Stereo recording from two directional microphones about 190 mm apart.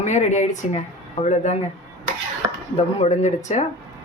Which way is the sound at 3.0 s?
35° left (ahead or behind).